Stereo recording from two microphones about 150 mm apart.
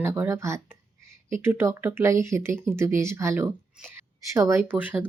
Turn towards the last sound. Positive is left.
turn(degrees=-10)  # may be behind; listen again after turning